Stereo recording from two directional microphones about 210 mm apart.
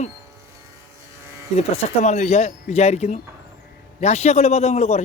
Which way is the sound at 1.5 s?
30° left (ahead or behind).